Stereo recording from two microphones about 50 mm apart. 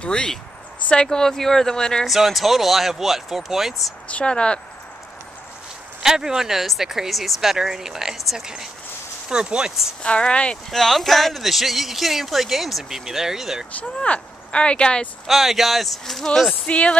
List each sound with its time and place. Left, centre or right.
0.0 s speech: centre
2.0 s speech: centre
4.1 s speech: left
6.0 s speech: centre
10.0 s speech: left
10.7 s speech: centre
13.9 s speech: left
15.2 s speech: centre
16.6 s speech: left